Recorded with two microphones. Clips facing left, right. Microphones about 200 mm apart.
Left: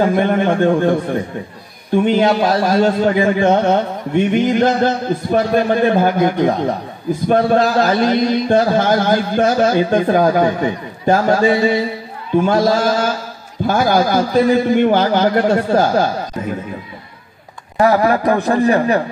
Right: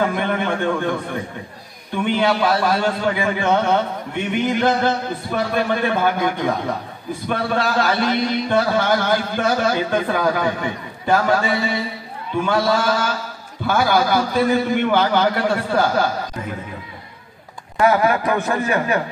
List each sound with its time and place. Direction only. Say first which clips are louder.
0.0 s a man's voice: left 6 dB; 45° left (ahead or behind)
2.0 s a man's voice: left 2 dB; 40° left (ahead or behind)
17.7 s a man's voice: left 3 dB; 35° left (ahead or behind)